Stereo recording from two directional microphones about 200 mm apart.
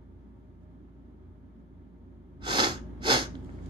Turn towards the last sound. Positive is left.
turn(degrees=-25)  # may be behind; listen again after turning